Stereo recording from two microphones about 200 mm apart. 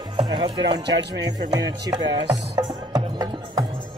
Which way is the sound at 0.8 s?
60° right (ahead or behind).